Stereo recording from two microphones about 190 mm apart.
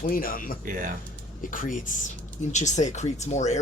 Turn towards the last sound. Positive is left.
turn(degrees=35)  # may be behind; listen again after turning